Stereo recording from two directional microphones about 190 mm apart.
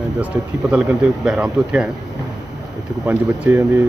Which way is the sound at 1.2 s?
5° right (ahead or behind).